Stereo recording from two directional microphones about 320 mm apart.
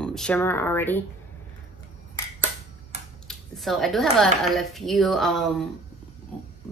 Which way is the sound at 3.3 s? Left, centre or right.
Centre.